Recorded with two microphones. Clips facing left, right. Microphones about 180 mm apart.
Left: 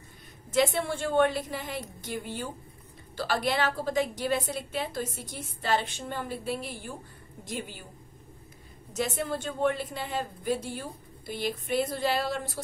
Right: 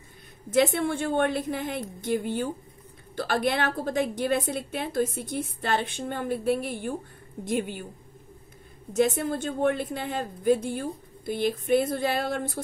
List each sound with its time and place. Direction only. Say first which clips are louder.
0.6 s a woman's voice: right 3 dB; 55° right (ahead or behind)
8.9 s a woman's voice: right 6 dB; 50° right (ahead or behind)